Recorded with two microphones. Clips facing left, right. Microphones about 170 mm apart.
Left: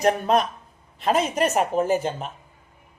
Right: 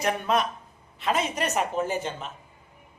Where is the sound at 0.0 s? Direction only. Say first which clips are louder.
Left 5 dB; 40° left (ahead or behind).